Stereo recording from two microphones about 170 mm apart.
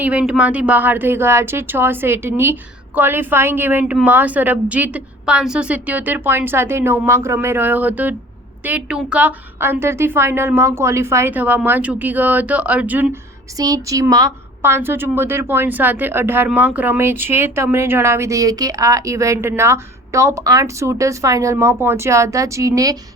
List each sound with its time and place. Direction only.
0.0 s a woman's voice: 5° right (ahead or behind)
13.6 s a woman's voice: 20° right (ahead or behind)